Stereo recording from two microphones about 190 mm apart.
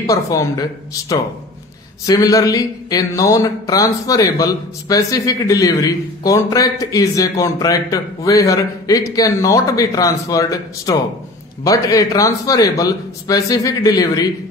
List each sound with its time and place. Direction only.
0.0 s speech: 15° left (ahead or behind)